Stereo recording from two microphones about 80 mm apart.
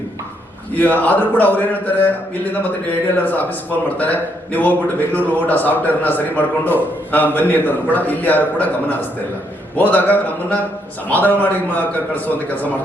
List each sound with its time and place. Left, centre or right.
0.8 s speech: left
9.7 s speech: left